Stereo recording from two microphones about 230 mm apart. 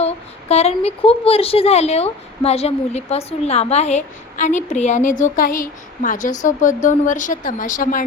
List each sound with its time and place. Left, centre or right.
0.0 s a woman's voice: left